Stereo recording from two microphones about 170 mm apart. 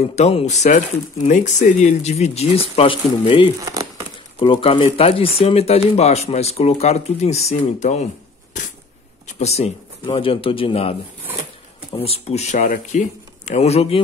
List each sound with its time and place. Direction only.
0.1 s speech: 40° left (ahead or behind)
9.2 s speech: 40° left (ahead or behind)
12.0 s speech: 35° left (ahead or behind)
13.5 s speech: 40° left (ahead or behind)